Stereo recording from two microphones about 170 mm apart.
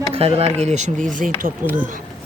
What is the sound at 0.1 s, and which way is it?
Speech, 35° right (ahead or behind).